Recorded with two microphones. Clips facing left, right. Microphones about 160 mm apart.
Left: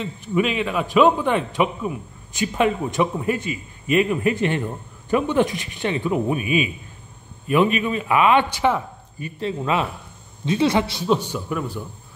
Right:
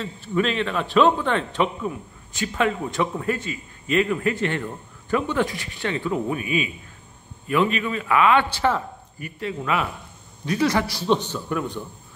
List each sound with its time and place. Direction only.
0.0 s a man's voice: 15° left (ahead or behind)
9.4 s a man's voice: 25° left (ahead or behind); by 11.8 s 5° left (ahead or behind)